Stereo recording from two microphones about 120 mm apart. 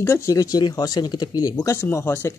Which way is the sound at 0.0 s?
25° left (ahead or behind).